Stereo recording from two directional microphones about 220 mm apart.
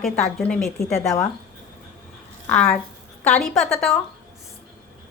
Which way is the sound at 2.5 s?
10° left (ahead or behind).